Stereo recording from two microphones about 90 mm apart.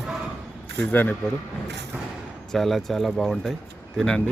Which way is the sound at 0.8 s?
15° left (ahead or behind).